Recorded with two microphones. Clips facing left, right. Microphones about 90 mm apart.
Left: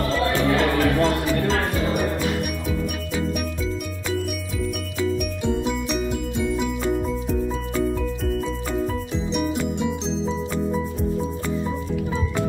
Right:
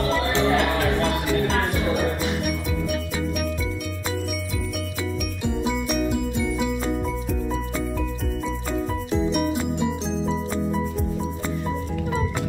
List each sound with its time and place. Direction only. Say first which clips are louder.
0.3 s music: left 1 dB; 20° right (ahead or behind)
9.3 s music: even; 5° right (ahead or behind)